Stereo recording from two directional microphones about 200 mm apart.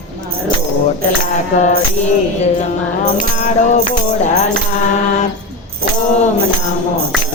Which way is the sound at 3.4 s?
35° left (ahead or behind).